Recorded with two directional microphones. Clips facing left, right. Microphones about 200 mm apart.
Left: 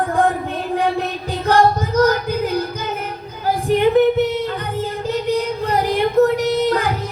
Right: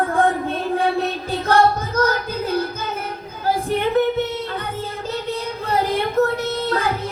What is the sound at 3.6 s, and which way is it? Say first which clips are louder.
Singing: left 7 dB; 15° left (ahead or behind).